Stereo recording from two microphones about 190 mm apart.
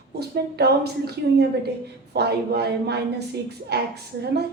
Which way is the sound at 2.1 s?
60° right (ahead or behind).